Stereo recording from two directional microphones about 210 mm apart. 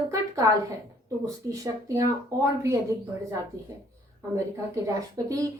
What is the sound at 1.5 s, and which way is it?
A woman's voice, 15° right (ahead or behind).